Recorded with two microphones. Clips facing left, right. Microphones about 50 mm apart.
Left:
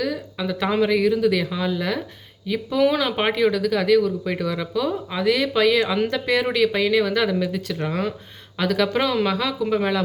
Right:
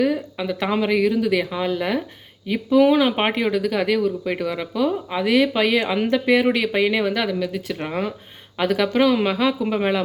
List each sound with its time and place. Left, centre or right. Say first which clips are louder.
0.0 s speech: right 5 dB; right
0.4 s speech: left 1 dB; centre
7.2 s speech: left 1 dB; centre
7.7 s speech: even; right
8.9 s speech: right 4 dB; centre
9.1 s speech: right 2 dB; centre